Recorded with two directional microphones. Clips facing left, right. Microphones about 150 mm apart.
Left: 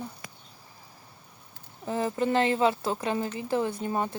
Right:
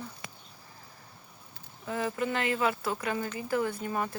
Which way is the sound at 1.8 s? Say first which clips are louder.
Left 4 dB; 30° left (ahead or behind).